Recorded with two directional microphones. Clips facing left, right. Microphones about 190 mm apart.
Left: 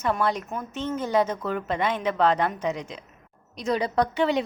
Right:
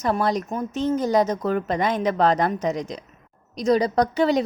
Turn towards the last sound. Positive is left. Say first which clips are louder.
# right 3 dB
turn(degrees=-40)  # may be behind; listen again after turning